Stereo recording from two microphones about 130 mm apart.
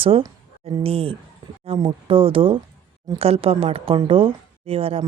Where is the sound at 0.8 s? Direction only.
50° right (ahead or behind).